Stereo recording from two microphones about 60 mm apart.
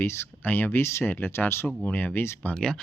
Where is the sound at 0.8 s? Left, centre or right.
Left.